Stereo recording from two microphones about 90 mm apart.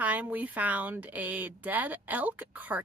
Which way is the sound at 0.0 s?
15° right (ahead or behind).